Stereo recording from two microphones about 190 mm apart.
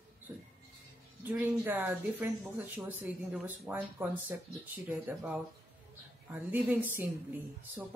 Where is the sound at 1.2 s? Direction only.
10° right (ahead or behind).